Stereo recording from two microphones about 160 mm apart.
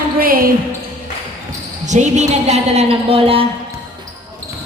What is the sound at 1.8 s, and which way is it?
A woman's voice, 45° right (ahead or behind).